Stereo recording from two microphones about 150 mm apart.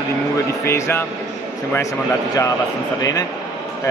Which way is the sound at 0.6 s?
15° left (ahead or behind).